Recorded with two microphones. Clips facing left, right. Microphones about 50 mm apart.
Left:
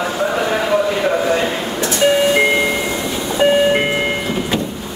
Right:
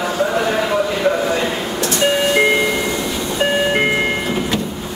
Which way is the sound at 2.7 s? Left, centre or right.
Centre.